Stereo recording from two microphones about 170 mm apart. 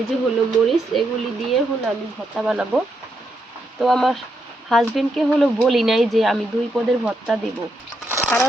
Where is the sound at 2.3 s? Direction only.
5° right (ahead or behind).